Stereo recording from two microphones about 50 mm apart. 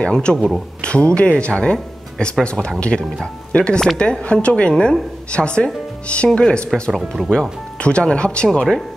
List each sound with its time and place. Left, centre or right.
0.0 s a woman's voice: centre
6.7 s speech: centre
7.8 s a woman's voice: left